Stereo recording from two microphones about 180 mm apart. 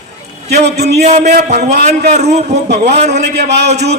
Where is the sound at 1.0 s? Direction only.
40° right (ahead or behind).